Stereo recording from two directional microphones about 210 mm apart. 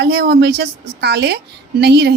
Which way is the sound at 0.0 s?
50° right (ahead or behind).